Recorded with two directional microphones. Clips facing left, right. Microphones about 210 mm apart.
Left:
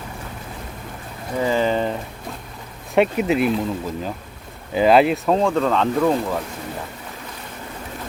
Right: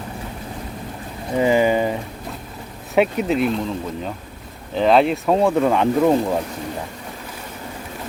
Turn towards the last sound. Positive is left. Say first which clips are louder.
# right 3 dB
turn(degrees=-20)  # may be behind; listen again after turning